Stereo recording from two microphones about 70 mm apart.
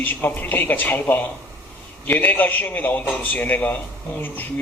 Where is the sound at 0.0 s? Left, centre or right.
Left.